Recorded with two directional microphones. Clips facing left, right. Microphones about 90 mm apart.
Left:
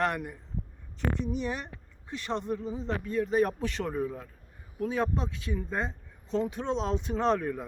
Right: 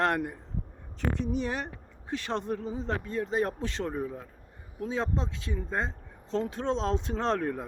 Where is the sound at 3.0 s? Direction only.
30° right (ahead or behind).